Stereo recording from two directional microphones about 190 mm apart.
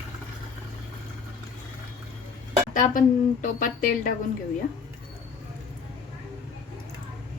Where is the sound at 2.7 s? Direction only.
45° left (ahead or behind).